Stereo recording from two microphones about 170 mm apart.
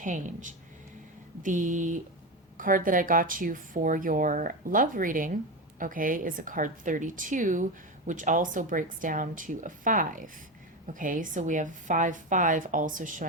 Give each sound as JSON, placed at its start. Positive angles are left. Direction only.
{"t": 0.0, "sound": "a woman's voice", "side_deg": -50}